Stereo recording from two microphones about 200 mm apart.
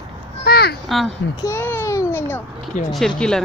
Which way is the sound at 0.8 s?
Centre (ahead or behind).